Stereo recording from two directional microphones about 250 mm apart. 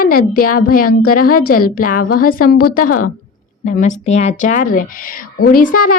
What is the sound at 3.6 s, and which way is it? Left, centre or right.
A woman's voice, left.